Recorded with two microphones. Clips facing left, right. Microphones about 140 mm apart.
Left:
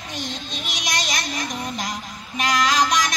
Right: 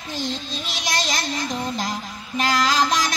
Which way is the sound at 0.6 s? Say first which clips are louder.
Right 2 dB; 30° right (ahead or behind).